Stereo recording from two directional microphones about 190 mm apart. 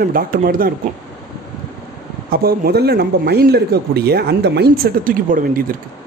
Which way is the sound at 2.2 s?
50° right (ahead or behind).